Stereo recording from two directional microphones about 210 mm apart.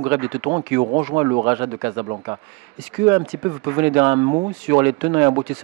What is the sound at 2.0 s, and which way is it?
Speech, 25° right (ahead or behind).